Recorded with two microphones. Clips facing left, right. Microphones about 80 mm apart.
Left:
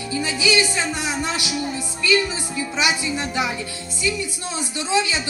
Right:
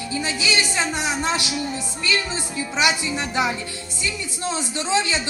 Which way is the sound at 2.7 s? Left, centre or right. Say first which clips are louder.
Right 1 dB; right.